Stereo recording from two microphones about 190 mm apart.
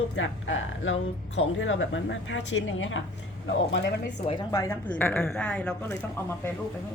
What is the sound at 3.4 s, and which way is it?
Speech, 70° left (ahead or behind).